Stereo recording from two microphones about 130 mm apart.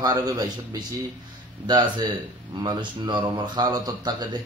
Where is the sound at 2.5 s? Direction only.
35° right (ahead or behind).